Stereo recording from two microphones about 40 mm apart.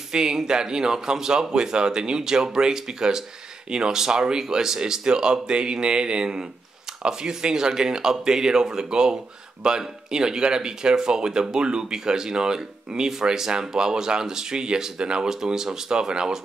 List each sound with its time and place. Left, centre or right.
0.1 s speech: centre